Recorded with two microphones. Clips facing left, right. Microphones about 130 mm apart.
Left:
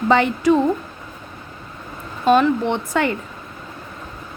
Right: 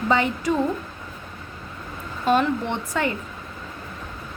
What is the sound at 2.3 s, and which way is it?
Speech, 90° left.